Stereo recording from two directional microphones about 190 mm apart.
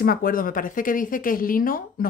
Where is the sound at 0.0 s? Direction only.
50° left (ahead or behind).